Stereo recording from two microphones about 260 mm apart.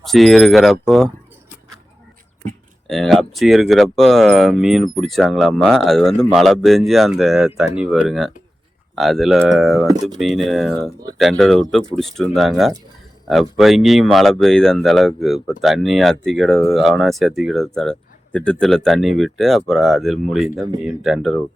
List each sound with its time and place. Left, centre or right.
0.0 s speech: centre
2.8 s speech: centre
9.8 s speech: centre
10.2 s speech: centre